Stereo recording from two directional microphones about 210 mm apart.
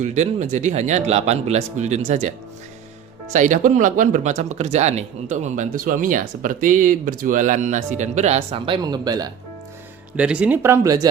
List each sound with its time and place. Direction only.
0.0 s speech: 35° right (ahead or behind)
3.3 s speech: 35° right (ahead or behind); by 9.3 s 20° right (ahead or behind)
10.2 s speech: 5° right (ahead or behind)